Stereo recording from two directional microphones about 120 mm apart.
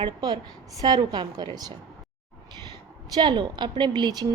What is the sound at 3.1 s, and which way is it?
A woman's voice, 40° right (ahead or behind).